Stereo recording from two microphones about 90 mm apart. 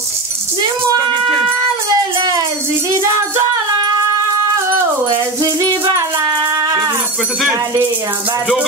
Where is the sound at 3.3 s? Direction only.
50° right (ahead or behind).